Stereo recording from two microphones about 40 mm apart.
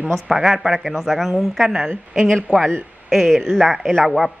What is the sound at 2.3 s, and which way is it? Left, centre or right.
Speech, centre.